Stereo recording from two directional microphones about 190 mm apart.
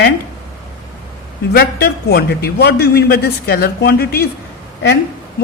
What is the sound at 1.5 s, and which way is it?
Speech, 55° left (ahead or behind).